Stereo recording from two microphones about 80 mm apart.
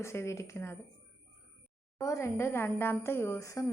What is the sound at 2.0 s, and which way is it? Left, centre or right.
A woman's voice, left.